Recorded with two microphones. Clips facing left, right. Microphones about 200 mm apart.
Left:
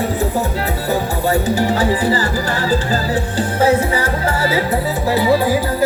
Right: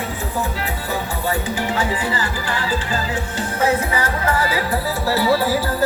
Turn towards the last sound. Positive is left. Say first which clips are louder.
# left 3 dB
turn(degrees=15)  # may be behind; listen again after turning